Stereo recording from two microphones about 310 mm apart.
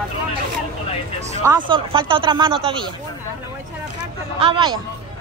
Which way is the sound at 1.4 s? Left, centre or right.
Centre.